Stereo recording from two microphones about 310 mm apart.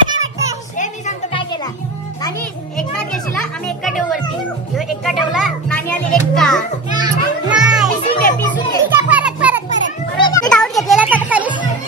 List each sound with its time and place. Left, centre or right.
0.1 s children playing: centre
0.7 s music: centre
3.0 s children playing: centre
4.7 s music: centre
8.1 s music: left
8.8 s children playing: centre
9.7 s children playing: centre